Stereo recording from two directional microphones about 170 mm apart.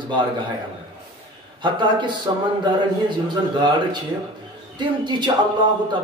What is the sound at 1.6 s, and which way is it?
Speech, 25° right (ahead or behind).